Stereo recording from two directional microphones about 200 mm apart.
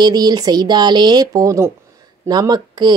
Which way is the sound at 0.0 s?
20° right (ahead or behind).